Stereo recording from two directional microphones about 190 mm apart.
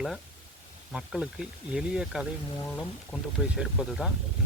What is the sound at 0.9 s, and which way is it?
Speech, 5° right (ahead or behind).